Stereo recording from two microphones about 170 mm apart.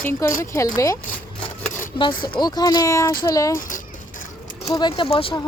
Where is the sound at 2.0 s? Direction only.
30° left (ahead or behind).